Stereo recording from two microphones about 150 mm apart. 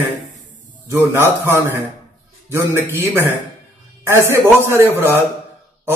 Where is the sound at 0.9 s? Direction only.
15° right (ahead or behind).